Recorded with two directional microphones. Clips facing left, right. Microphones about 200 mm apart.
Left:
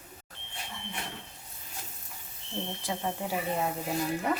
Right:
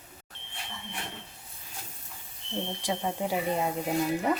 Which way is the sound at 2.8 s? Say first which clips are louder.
Right 3 dB; 15° right (ahead or behind).